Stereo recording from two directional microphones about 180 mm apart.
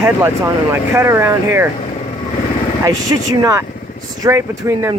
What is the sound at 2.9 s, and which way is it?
Speech, 20° right (ahead or behind).